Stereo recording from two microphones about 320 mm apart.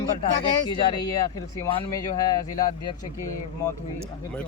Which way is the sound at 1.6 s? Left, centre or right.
Centre.